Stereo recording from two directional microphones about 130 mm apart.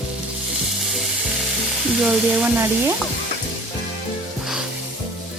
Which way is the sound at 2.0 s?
10° right (ahead or behind).